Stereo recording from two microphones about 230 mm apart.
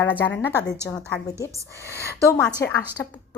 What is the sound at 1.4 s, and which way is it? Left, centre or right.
Speech, centre.